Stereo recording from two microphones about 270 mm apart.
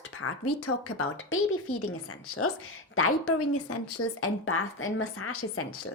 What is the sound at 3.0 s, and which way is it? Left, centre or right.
A woman's voice, left.